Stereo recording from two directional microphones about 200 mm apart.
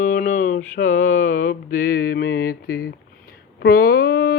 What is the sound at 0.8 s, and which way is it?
Mantra, 40° left (ahead or behind).